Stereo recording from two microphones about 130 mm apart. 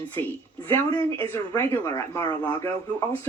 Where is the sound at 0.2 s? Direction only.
15° left (ahead or behind).